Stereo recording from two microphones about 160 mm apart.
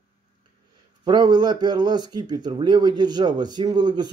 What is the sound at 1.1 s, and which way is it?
Speech, 25° right (ahead or behind).